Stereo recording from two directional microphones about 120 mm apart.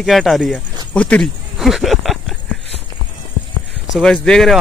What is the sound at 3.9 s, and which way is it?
Speech, centre (ahead or behind).